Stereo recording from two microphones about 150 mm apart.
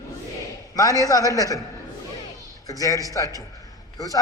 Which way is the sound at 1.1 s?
25° left (ahead or behind).